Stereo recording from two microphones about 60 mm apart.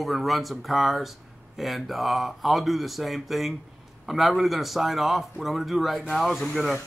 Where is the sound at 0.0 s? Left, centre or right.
Centre.